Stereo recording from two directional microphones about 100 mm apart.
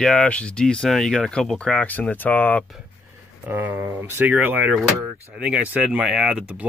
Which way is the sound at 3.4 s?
15° right (ahead or behind).